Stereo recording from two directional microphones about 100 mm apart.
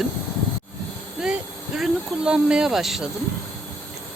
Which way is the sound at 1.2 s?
5° right (ahead or behind).